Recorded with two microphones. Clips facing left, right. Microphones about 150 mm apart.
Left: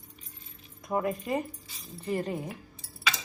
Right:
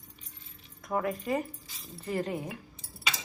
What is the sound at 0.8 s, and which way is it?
Speech, 20° left (ahead or behind).